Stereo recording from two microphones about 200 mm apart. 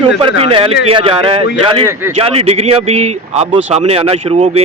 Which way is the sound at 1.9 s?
10° right (ahead or behind).